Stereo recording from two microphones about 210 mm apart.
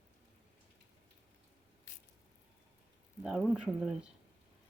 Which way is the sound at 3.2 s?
Centre (ahead or behind).